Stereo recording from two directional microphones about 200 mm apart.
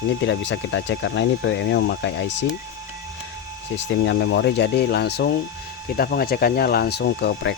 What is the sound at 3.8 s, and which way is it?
Speech, 65° left (ahead or behind).